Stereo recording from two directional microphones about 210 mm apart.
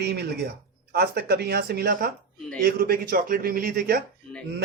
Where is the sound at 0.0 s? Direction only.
50° right (ahead or behind).